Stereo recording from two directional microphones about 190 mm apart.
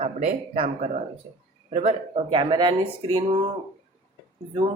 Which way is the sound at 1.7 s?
35° right (ahead or behind).